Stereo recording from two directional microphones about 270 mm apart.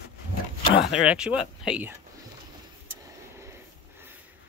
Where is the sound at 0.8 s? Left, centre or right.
Centre.